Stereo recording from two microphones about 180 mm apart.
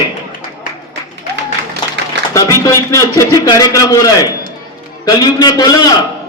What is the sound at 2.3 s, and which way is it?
A man's voice, 20° left (ahead or behind).